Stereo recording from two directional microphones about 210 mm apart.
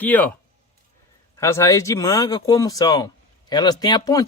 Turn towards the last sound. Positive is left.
turn(degrees=15)  # may be behind; listen again after turning